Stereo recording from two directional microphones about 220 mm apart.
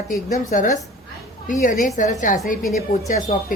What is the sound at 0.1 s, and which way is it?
Speech, 35° left (ahead or behind).